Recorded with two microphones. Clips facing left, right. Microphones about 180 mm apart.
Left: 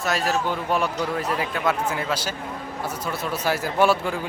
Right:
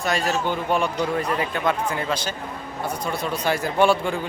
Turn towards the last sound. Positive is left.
turn(degrees=5)  # may be behind; listen again after turning